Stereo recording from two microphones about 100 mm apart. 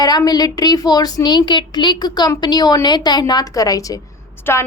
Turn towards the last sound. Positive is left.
turn(degrees=25)  # may be behind; listen again after turning